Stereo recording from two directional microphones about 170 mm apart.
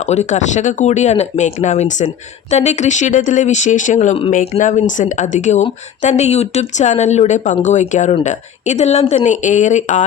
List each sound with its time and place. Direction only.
0.1 s speech: 45° left (ahead or behind)